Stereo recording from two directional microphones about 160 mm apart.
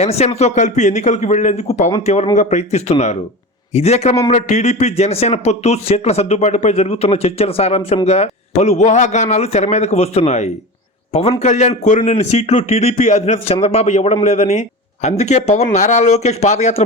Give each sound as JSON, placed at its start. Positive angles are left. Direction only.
{"t": 0.0, "sound": "a man's voice", "side_deg": 40}